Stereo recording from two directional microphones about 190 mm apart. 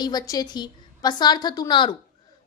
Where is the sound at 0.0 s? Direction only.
20° left (ahead or behind).